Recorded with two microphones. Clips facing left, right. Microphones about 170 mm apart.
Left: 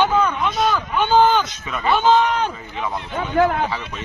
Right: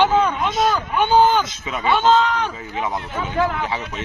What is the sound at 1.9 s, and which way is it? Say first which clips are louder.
Speech: even; 10° left (ahead or behind).